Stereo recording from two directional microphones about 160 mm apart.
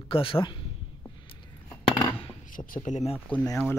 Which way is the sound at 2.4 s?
60° left (ahead or behind).